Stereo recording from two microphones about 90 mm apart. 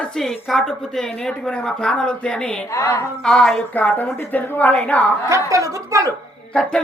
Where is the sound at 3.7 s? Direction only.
20° left (ahead or behind).